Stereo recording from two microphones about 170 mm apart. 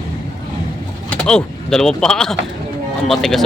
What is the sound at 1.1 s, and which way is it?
Speech, 5° left (ahead or behind).